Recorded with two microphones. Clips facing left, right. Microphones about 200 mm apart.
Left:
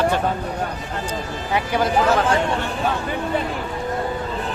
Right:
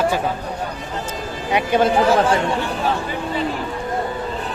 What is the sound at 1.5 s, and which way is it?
Speech, 25° right (ahead or behind).